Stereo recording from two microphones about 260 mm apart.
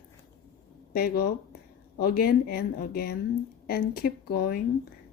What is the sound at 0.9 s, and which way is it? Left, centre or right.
Speech, left.